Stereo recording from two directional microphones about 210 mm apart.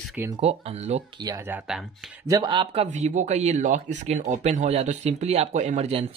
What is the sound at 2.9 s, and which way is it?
Speech, 35° right (ahead or behind).